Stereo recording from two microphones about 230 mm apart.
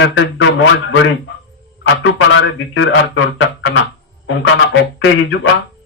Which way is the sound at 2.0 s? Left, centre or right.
Left.